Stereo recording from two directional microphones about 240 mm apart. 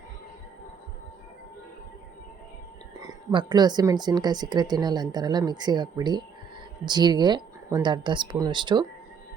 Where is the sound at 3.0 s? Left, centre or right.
Centre.